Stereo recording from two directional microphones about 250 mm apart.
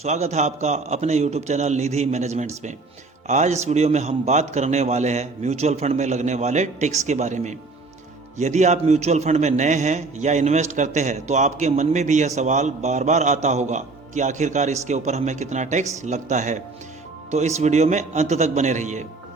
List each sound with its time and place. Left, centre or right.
0.0 s a man's voice: right